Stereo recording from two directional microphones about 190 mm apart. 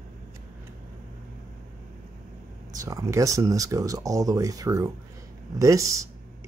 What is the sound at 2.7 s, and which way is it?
Speech, 20° right (ahead or behind).